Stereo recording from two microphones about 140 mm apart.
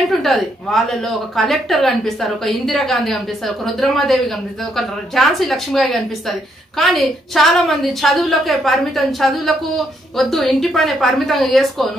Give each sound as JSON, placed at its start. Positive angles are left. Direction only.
{"t": 0.2, "sound": "a woman's voice", "side_deg": 0}